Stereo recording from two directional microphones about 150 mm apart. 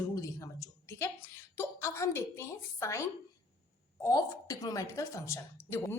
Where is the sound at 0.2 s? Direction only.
20° left (ahead or behind).